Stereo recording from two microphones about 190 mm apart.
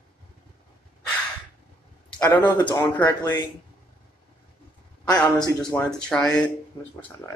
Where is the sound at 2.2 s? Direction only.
10° left (ahead or behind).